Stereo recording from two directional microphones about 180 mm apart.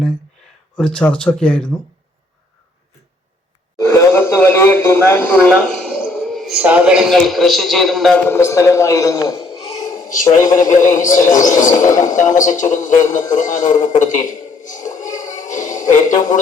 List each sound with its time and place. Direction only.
0.8 s speech: 5° left (ahead or behind)
3.8 s speech: 15° left (ahead or behind); by 8.2 s centre (ahead or behind)
8.3 s a man's voice: 15° left (ahead or behind)
9.7 s a man's voice: 45° left (ahead or behind)